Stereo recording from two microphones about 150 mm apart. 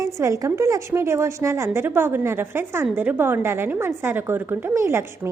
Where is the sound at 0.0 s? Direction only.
20° right (ahead or behind).